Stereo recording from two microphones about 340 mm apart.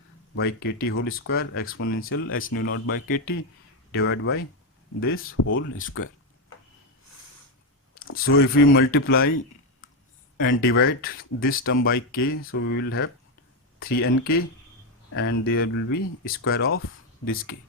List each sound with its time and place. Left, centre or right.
0.3 s speech: left
7.9 s speech: left
10.3 s speech: left